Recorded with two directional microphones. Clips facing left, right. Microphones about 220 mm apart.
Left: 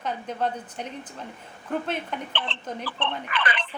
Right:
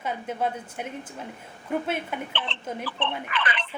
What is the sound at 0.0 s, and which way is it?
Speech, 5° right (ahead or behind).